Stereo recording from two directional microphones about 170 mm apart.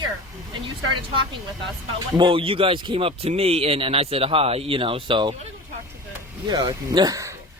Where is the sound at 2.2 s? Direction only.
30° right (ahead or behind).